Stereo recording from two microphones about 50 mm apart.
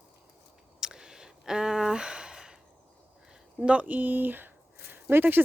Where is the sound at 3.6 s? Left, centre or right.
Right.